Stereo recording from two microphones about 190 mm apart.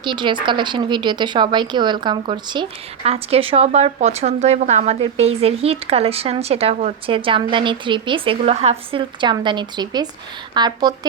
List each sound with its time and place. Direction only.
0.0 s speech: 25° right (ahead or behind)